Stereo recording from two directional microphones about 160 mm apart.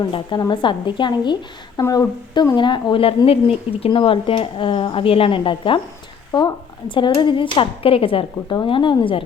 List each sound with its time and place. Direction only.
0.0 s a woman's voice: 25° left (ahead or behind)